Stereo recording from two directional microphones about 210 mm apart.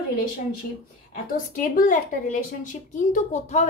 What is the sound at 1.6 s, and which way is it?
A woman's voice, 40° left (ahead or behind).